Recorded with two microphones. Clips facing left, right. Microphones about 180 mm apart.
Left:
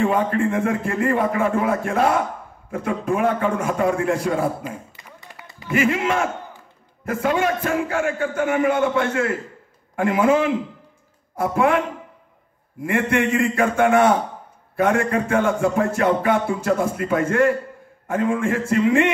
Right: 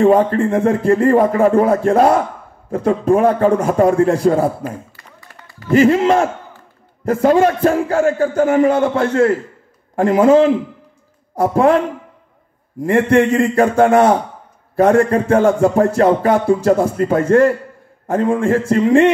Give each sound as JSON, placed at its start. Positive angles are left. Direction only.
{"t": 0.0, "sound": "music", "side_deg": -35}
{"t": 4.6, "sound": "a sound", "side_deg": 20}
{"t": 5.7, "sound": "music", "side_deg": -35}
{"t": 12.8, "sound": "music", "side_deg": -35}